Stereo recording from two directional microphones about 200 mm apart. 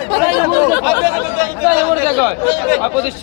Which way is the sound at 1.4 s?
10° right (ahead or behind).